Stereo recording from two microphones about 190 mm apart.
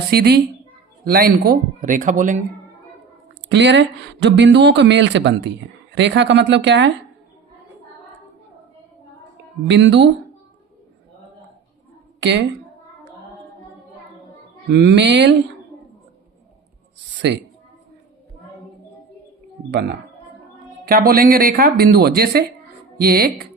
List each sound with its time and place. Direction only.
0.1 s speech: 55° right (ahead or behind)
3.5 s speech: 70° right (ahead or behind)
9.6 s speech: 70° right (ahead or behind)
14.7 s speech: 65° right (ahead or behind)
17.2 s speech: 65° right (ahead or behind)
20.8 s speech: 50° right (ahead or behind)